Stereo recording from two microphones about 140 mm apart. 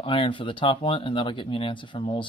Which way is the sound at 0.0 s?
40° left (ahead or behind).